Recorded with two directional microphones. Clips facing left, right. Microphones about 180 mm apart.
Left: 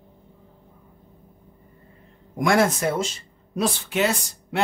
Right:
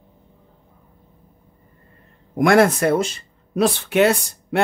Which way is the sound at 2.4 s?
60° right (ahead or behind).